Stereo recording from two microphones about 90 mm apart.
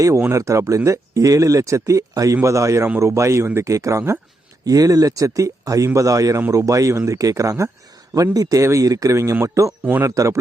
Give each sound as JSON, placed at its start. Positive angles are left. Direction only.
{"t": 0.2, "sound": "speech", "side_deg": -35}